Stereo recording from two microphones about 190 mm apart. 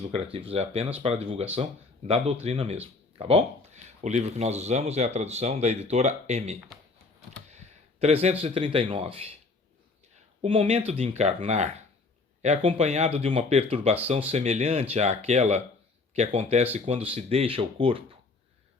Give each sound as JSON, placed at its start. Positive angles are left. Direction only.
{"t": 0.0, "sound": "speech", "side_deg": -30}
{"t": 10.4, "sound": "speech", "side_deg": -30}